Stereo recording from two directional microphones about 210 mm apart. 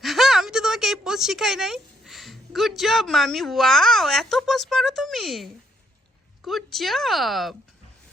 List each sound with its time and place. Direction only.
0.0 s a woman's voice: centre (ahead or behind)